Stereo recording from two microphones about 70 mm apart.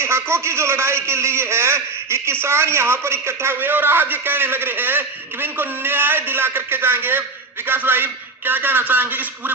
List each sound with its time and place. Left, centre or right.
0.0 s a man's voice: right